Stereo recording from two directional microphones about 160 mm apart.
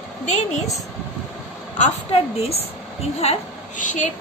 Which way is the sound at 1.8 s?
40° left (ahead or behind).